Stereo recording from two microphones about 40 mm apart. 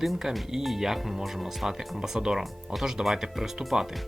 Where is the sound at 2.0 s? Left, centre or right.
Centre.